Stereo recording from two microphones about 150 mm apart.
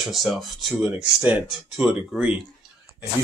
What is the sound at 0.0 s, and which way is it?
Speech, centre (ahead or behind).